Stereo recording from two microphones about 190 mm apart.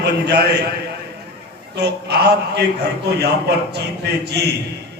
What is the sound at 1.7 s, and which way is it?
A man's voice, 60° right (ahead or behind).